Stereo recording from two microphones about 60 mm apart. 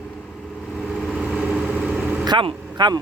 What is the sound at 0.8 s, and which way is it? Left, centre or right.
Vehicle, centre.